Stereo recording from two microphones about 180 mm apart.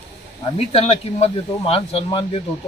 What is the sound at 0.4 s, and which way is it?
Speech, 30° left (ahead or behind).